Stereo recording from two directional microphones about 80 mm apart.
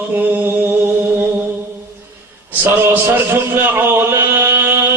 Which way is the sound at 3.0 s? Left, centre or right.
Right.